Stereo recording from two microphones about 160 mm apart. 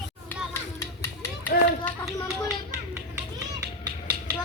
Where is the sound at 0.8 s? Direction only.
15° left (ahead or behind).